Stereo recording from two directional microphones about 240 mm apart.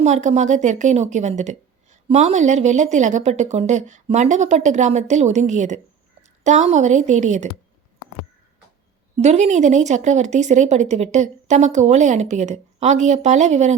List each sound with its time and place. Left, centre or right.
0.0 s speech: right
9.1 s speech: right